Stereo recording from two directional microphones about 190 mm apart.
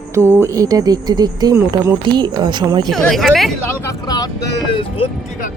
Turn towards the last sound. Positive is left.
turn(degrees=25)  # may be behind; listen again after turning